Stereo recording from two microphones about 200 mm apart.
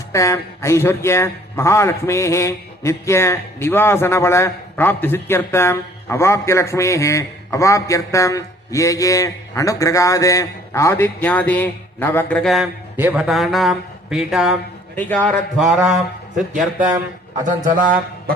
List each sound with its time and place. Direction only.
0.1 s a man's voice: 15° left (ahead or behind); by 16.0 s centre (ahead or behind)
17.4 s speech: 40° right (ahead or behind)